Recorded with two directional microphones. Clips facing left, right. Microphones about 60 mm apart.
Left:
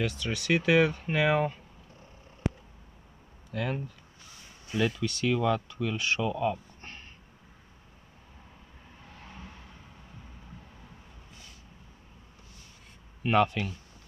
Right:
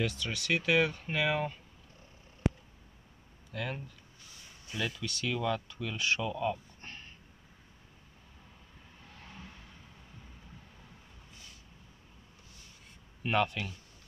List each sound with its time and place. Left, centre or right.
0.0 s speech: centre
3.5 s speech: centre
5.2 s speech: centre
5.9 s speech: centre
6.2 s a sound: centre
9.3 s vehicle: left
13.2 s speech: centre